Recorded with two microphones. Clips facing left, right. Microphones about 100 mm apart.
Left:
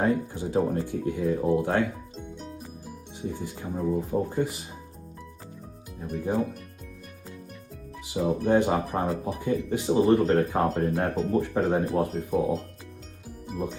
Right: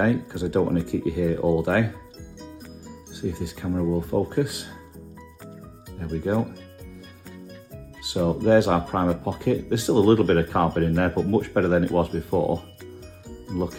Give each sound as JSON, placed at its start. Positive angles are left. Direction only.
{"t": 0.0, "sound": "speech", "side_deg": -90}
{"t": 3.2, "sound": "speech", "side_deg": -90}
{"t": 6.0, "sound": "speech", "side_deg": -85}
{"t": 8.0, "sound": "speech", "side_deg": -90}